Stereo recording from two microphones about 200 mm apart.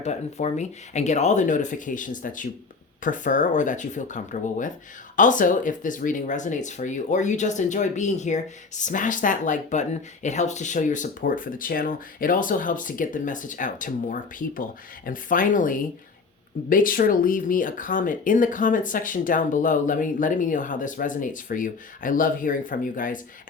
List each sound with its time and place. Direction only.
0.0 s speech: 35° left (ahead or behind)